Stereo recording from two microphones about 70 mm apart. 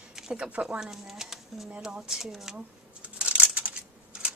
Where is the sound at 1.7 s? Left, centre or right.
Centre.